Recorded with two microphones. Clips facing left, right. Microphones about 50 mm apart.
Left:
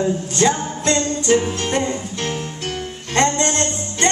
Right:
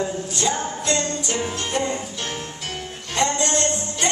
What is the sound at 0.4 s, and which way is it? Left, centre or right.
Music, left.